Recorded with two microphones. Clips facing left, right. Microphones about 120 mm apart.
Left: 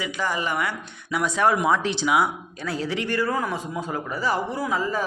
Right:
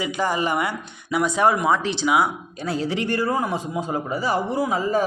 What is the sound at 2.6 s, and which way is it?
A man's voice, 25° right (ahead or behind).